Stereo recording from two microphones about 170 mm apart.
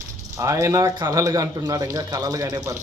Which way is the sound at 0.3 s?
20° right (ahead or behind).